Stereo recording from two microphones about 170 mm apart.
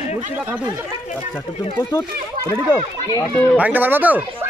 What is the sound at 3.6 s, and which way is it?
Speech, 10° right (ahead or behind).